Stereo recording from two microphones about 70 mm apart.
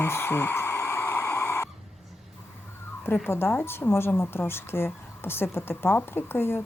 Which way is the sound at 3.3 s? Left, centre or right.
Left.